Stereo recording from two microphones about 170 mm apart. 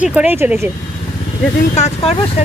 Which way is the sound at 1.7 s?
40° left (ahead or behind).